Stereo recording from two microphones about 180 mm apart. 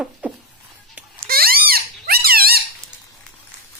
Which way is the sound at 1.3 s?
55° right (ahead or behind).